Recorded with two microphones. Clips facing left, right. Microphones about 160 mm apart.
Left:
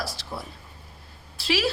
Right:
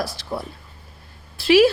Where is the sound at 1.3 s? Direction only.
55° right (ahead or behind).